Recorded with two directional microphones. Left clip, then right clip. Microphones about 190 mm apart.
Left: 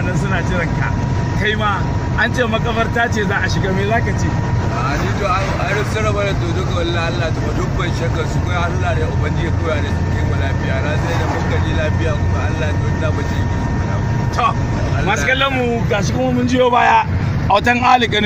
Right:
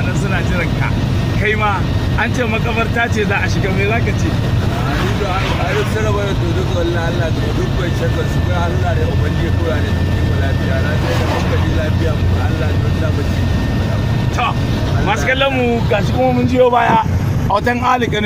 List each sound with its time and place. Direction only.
1.4 s speech: 20° left (ahead or behind)
16.5 s a man's voice: 15° left (ahead or behind)